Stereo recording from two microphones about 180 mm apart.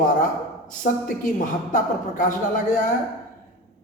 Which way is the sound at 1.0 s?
45° left (ahead or behind).